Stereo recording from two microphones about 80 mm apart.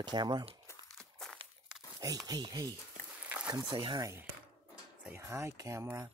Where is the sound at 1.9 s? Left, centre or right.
Right.